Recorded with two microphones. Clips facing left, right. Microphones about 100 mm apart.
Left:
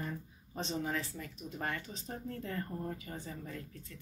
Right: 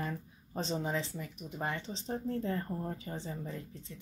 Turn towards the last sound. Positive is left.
turn(degrees=-20)  # may be behind; listen again after turning